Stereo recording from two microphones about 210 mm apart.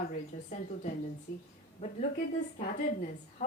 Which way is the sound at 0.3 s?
40° left (ahead or behind).